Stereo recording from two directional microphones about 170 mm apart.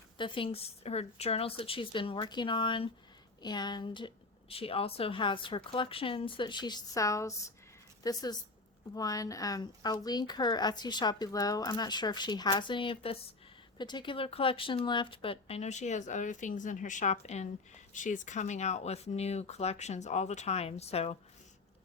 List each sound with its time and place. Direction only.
0.2 s a woman's voice: 30° left (ahead or behind)